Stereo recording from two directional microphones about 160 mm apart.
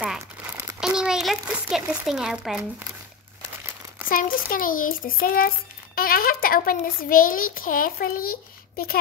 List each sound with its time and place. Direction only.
0.7 s a child's voice: 5° right (ahead or behind)
4.1 s a child's voice: 60° left (ahead or behind)